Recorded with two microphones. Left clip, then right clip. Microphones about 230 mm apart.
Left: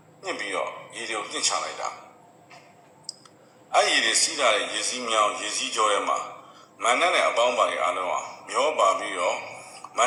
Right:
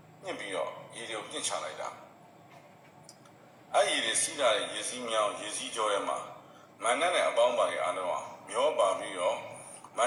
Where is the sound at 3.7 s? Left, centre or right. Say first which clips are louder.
Left 7 dB; left.